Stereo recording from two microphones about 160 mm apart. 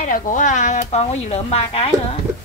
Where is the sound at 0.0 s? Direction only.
55° left (ahead or behind).